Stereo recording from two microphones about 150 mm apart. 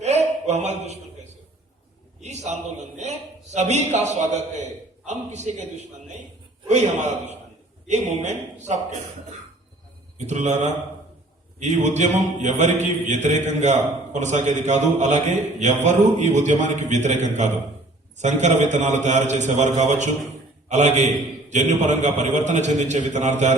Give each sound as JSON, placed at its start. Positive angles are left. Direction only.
{"t": 0.0, "sound": "a sound", "side_deg": -45}
{"t": 3.0, "sound": "a man's voice", "side_deg": -50}
{"t": 6.7, "sound": "mantra", "side_deg": -50}
{"t": 10.2, "sound": "mantra", "side_deg": -50}